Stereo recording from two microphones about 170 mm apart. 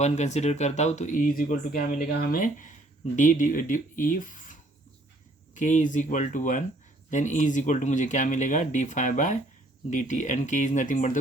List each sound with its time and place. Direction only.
0.0 s speech: 40° left (ahead or behind)
5.5 s speech: 45° left (ahead or behind)